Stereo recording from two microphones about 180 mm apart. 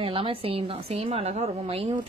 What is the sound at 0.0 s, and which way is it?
A woman's voice, 30° right (ahead or behind).